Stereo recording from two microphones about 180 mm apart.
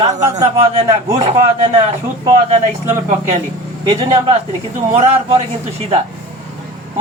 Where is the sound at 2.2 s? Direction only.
25° right (ahead or behind).